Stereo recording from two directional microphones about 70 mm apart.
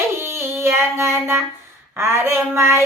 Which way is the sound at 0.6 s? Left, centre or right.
Right.